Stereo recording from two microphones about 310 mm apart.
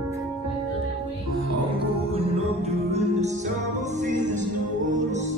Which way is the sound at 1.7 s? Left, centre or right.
Centre.